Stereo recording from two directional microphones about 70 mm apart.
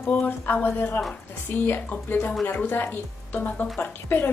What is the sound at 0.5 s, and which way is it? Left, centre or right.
A woman's voice, left.